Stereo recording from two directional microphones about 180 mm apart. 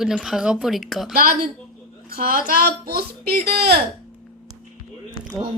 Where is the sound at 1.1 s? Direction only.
55° right (ahead or behind).